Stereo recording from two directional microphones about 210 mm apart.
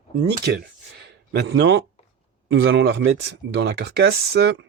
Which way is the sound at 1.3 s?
55° right (ahead or behind).